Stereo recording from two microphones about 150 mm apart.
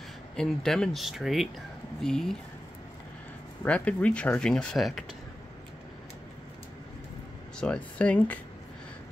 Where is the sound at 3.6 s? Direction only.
10° left (ahead or behind).